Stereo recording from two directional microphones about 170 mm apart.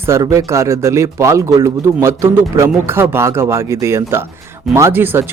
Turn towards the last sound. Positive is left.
turn(degrees=-10)  # may be behind; listen again after turning